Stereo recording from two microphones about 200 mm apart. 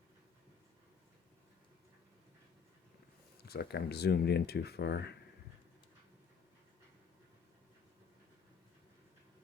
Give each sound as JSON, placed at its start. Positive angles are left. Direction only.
{"t": 3.3, "sound": "speech", "side_deg": 50}